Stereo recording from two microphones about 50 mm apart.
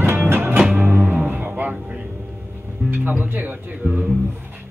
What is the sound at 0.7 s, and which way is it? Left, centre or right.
Music, right.